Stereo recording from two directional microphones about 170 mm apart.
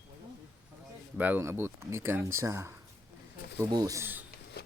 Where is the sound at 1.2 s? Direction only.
10° right (ahead or behind).